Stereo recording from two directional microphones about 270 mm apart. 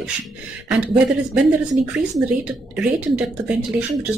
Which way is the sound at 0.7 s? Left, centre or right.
Centre.